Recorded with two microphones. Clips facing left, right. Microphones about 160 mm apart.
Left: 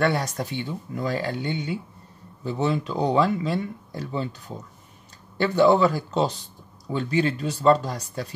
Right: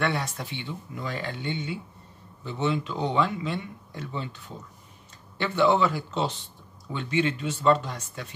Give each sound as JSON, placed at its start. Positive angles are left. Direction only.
{"t": 0.0, "sound": "speech", "side_deg": 40}